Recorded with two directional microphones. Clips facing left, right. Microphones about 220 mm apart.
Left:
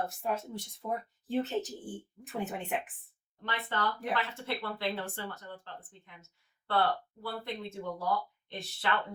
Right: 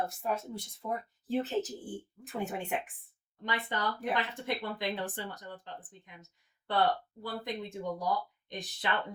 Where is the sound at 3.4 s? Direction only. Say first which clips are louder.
Even; 15° right (ahead or behind).